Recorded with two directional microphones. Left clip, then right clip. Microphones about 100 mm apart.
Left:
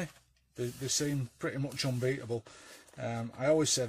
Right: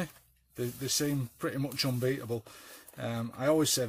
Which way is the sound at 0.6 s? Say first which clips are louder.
Right 2 dB; 45° right (ahead or behind).